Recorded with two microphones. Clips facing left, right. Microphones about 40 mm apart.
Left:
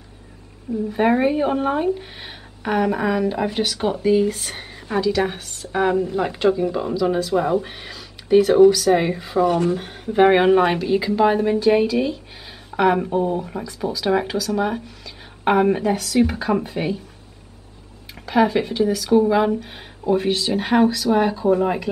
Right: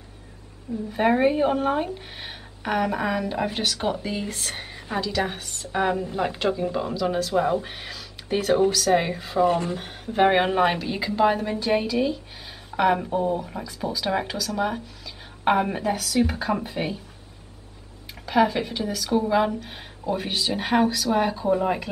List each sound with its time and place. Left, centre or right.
0.9 s speech: centre
9.4 s speech: left
9.7 s speech: centre
18.2 s speech: centre